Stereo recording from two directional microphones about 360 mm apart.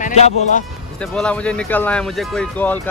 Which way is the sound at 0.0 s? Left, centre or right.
Left.